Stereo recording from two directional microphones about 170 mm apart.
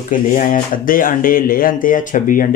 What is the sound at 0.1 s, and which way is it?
Speech, 50° left (ahead or behind).